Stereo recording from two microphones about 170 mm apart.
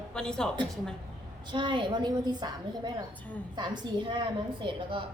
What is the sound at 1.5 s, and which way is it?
A woman's voice, 30° right (ahead or behind).